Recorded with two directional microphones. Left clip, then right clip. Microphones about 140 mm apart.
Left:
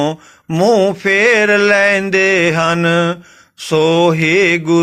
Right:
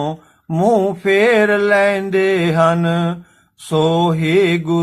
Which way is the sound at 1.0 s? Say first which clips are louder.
Even; 25° left (ahead or behind).